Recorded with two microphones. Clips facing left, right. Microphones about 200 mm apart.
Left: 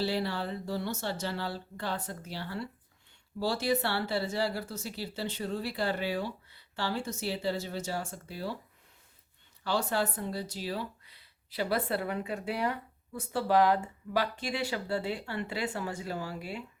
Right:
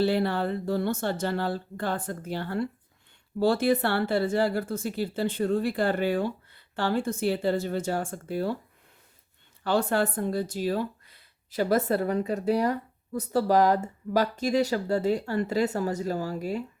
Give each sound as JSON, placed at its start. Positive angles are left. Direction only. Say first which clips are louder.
{"t": 0.0, "sound": "speech", "louder": "right 7 dB", "side_deg": -55}
{"t": 9.6, "sound": "speech", "louder": "right 6 dB", "side_deg": -55}